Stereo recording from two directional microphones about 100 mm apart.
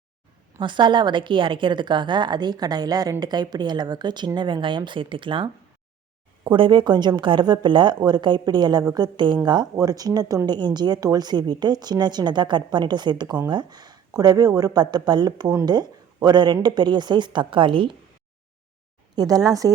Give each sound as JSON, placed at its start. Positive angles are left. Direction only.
{"t": 0.6, "sound": "a woman's voice", "side_deg": -50}
{"t": 19.1, "sound": "speech", "side_deg": -40}